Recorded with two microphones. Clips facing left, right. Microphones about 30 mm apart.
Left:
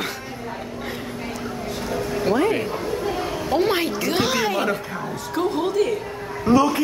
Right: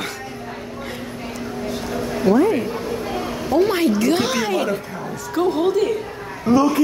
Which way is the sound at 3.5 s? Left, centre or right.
Left.